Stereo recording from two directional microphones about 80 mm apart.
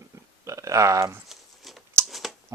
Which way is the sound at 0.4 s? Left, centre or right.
Right.